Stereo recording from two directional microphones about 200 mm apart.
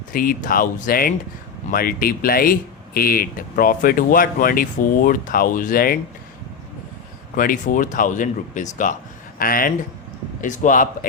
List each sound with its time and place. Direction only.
0.1 s speech: 45° left (ahead or behind)
7.3 s speech: 40° left (ahead or behind)